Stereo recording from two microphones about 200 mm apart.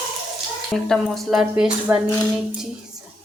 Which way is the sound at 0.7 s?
Centre (ahead or behind).